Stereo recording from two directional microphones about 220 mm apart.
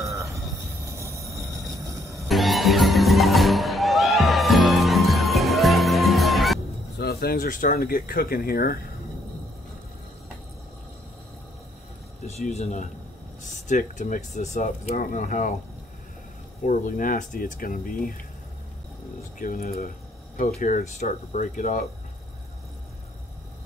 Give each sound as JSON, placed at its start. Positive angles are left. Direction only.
{"t": 0.1, "sound": "a sound", "side_deg": -15}
{"t": 1.3, "sound": "vehicle", "side_deg": -15}
{"t": 1.8, "sound": "music", "side_deg": -15}
{"t": 2.2, "sound": "music", "side_deg": 0}
{"t": 7.0, "sound": "speech", "side_deg": 45}
{"t": 12.3, "sound": "speech", "side_deg": 30}
{"t": 16.6, "sound": "speech", "side_deg": 35}
{"t": 19.3, "sound": "speech", "side_deg": 40}